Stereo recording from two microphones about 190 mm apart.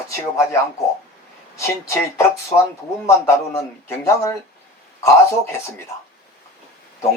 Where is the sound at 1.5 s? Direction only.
15° left (ahead or behind).